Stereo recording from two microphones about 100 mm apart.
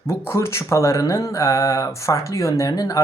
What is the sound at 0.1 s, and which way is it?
Speech, 25° left (ahead or behind).